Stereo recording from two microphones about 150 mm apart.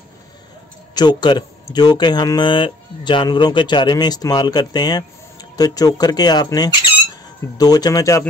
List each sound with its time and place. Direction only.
0.9 s speech: 30° left (ahead or behind)